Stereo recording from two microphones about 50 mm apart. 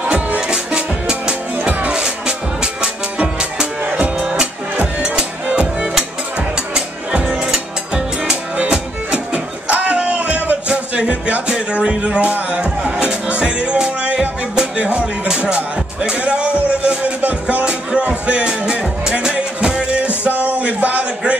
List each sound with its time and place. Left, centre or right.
0.4 s music: centre
12.2 s music: right